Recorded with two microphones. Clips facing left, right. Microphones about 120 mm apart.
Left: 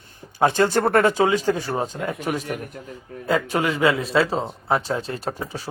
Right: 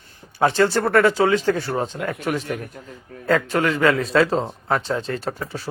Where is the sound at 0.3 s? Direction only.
15° left (ahead or behind).